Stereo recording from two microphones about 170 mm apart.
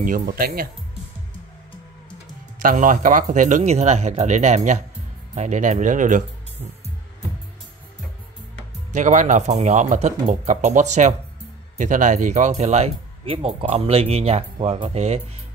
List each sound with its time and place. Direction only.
0.0 s speech: 50° right (ahead or behind)
2.6 s speech: 50° right (ahead or behind)
8.9 s speech: 45° right (ahead or behind)